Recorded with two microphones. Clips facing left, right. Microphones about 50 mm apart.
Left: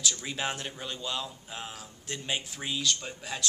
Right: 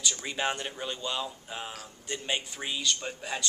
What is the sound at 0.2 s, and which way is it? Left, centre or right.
A man's voice, centre.